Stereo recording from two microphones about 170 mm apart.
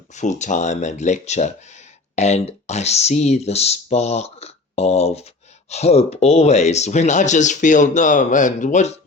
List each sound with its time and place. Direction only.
0.1 s speech: 45° left (ahead or behind)